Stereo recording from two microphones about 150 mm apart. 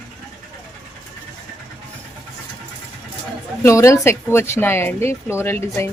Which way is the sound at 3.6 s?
20° left (ahead or behind).